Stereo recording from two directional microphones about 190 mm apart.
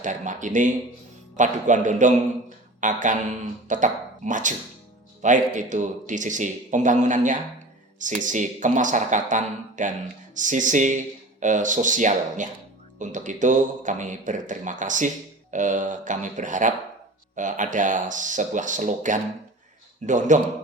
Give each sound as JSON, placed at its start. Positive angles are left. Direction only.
{"t": 0.0, "sound": "a man's voice", "side_deg": -40}